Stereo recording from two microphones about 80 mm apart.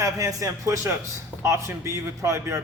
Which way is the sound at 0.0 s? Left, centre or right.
Right.